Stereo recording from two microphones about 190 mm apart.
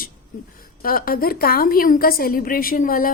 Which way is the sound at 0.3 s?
45° left (ahead or behind).